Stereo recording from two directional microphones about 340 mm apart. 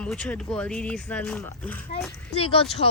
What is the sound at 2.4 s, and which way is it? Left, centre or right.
Speech, centre.